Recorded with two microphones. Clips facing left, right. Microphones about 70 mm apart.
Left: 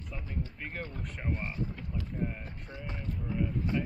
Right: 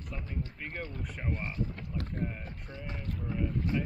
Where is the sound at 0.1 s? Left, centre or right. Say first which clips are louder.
Even; centre.